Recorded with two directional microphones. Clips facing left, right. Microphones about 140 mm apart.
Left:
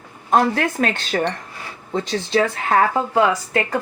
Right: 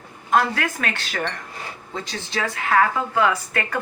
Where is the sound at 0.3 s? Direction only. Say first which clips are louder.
Left 3 dB; 30° left (ahead or behind).